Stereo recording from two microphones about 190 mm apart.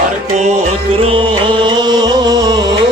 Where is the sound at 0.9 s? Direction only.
30° right (ahead or behind).